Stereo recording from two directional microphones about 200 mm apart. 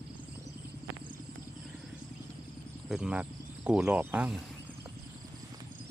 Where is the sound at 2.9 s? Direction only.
5° right (ahead or behind).